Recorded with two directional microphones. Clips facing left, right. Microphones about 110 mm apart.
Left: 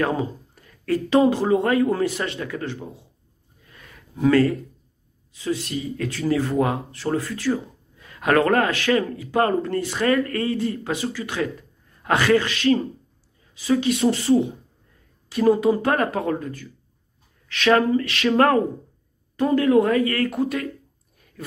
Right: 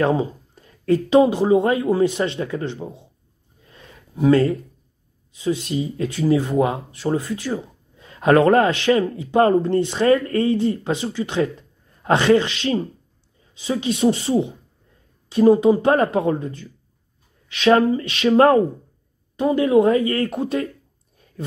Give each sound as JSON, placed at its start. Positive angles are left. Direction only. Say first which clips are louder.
{"t": 0.0, "sound": "speech", "louder": "right 4 dB", "side_deg": -25}
{"t": 3.6, "sound": "a sound", "louder": "right 2 dB", "side_deg": -25}
{"t": 5.3, "sound": "speech", "louder": "right 3 dB", "side_deg": -20}
{"t": 19.3, "sound": "speech", "louder": "right 1 dB", "side_deg": -20}